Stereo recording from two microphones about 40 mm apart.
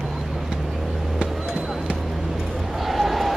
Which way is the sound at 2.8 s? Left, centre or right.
Centre.